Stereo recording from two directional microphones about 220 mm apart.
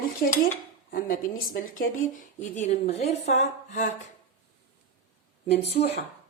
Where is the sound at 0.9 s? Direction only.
40° left (ahead or behind).